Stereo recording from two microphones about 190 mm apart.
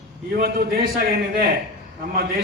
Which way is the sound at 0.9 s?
55° right (ahead or behind).